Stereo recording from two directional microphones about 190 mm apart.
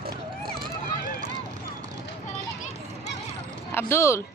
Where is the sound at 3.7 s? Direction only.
10° left (ahead or behind).